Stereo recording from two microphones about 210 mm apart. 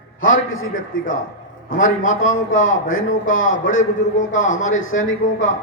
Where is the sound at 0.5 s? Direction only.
70° left (ahead or behind).